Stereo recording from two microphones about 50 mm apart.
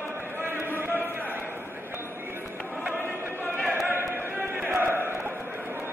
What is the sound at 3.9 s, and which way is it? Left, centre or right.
Basketball bounce, right.